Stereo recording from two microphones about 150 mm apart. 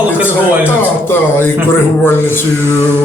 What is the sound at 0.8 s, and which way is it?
Speech, 15° left (ahead or behind).